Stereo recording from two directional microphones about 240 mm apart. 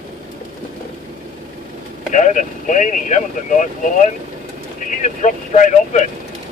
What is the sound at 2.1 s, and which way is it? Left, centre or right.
Speech, left.